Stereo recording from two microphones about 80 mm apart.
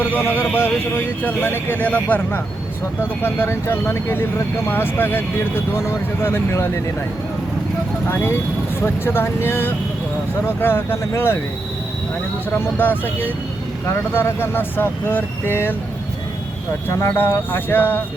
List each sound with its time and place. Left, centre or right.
0.0 s speech: left
8.0 s speech: left
12.5 s speech: left
17.0 s speech: left